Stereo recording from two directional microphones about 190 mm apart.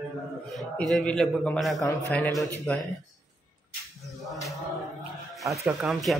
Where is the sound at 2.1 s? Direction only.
5° left (ahead or behind).